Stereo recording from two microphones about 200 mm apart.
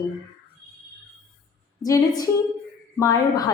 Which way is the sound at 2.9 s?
15° left (ahead or behind).